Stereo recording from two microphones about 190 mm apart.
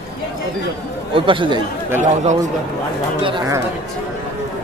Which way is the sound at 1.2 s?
25° right (ahead or behind).